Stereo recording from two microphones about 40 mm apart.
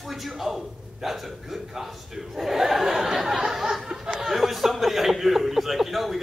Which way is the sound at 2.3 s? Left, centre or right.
Centre.